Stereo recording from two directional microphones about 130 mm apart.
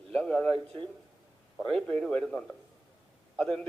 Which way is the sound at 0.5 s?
45° right (ahead or behind).